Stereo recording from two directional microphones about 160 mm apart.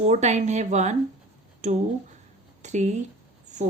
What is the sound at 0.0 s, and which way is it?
A woman's voice, 45° right (ahead or behind).